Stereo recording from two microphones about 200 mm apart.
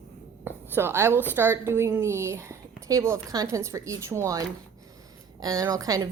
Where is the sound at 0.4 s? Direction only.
10° right (ahead or behind).